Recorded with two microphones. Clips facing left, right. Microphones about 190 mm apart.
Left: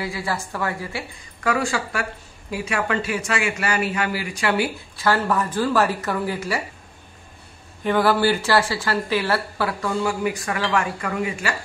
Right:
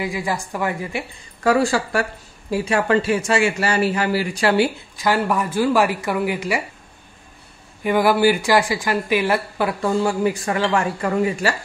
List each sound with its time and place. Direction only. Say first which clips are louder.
0.0 s speech: right 3 dB; 15° right (ahead or behind)
1.4 s a man's voice: right 5 dB; 35° right (ahead or behind)
4.9 s speech: even; 15° right (ahead or behind)
7.8 s speech: right 3 dB; 10° right (ahead or behind)
10.0 s a man's voice: right 4 dB; 30° right (ahead or behind)